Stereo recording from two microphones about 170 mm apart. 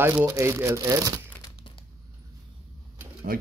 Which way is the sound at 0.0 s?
15° right (ahead or behind).